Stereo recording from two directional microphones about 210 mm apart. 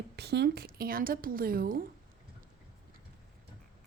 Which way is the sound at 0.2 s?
50° right (ahead or behind).